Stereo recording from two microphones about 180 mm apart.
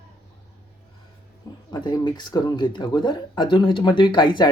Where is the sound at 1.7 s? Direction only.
20° left (ahead or behind).